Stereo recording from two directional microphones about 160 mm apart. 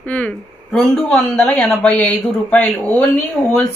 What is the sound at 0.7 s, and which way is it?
A woman's voice, 5° left (ahead or behind).